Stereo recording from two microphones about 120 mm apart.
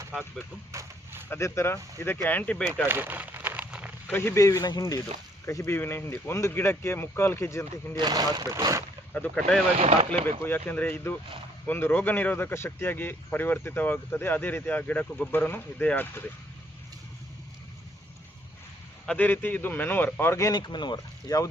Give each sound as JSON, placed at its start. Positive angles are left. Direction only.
{"t": 0.7, "sound": "speech", "side_deg": -25}
{"t": 1.3, "sound": "speech", "side_deg": 20}
{"t": 2.8, "sound": "a sound", "side_deg": -15}
{"t": 4.1, "sound": "speech", "side_deg": 20}
{"t": 7.9, "sound": "speech", "side_deg": -35}
{"t": 9.1, "sound": "speech", "side_deg": 10}
{"t": 9.7, "sound": "speech", "side_deg": -55}
{"t": 10.2, "sound": "speech", "side_deg": 15}
{"t": 19.0, "sound": "speech", "side_deg": 10}
{"t": 20.5, "sound": "speech", "side_deg": 35}